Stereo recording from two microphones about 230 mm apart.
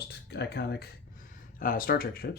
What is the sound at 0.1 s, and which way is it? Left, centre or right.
Speech, left.